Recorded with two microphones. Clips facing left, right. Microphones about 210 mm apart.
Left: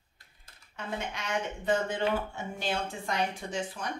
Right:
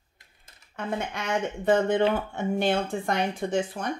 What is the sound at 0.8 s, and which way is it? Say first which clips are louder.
Speech: right 6 dB; 55° right (ahead or behind).